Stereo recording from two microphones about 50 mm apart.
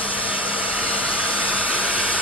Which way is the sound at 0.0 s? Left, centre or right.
Right.